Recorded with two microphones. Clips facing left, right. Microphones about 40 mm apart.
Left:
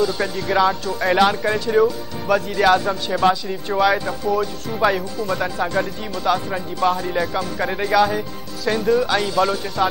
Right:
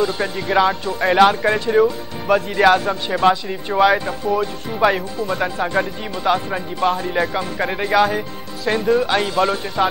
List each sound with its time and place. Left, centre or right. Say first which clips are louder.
0.0 s speech: even; centre
9.8 s speech: right 1 dB; right